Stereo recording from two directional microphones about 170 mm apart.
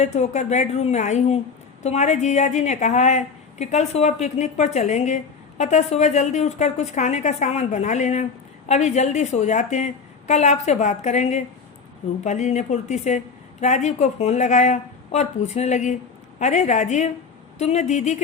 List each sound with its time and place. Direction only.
0.0 s a woman's voice: 40° left (ahead or behind)